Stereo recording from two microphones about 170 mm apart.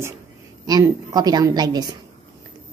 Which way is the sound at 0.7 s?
20° right (ahead or behind).